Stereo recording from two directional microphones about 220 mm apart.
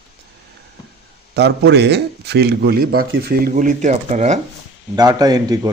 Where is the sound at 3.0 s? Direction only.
55° right (ahead or behind); by 4.4 s 30° right (ahead or behind).